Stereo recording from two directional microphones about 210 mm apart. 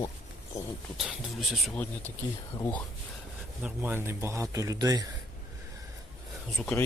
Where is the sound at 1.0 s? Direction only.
Centre (ahead or behind).